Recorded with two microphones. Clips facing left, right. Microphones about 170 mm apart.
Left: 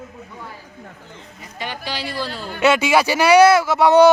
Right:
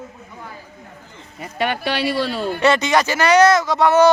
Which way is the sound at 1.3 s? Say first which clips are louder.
Right 9 dB; 65° right (ahead or behind).